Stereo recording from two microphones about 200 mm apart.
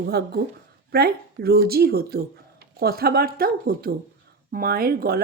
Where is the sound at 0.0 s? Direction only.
50° right (ahead or behind).